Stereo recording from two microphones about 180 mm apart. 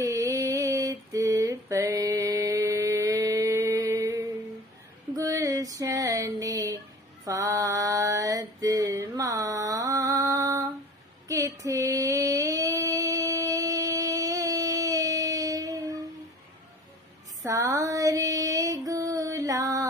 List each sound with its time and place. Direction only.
0.0 s mantra: 20° right (ahead or behind)
5.1 s a sound: 20° right (ahead or behind)
7.2 s female singing: 15° right (ahead or behind)
17.4 s female singing: 20° right (ahead or behind)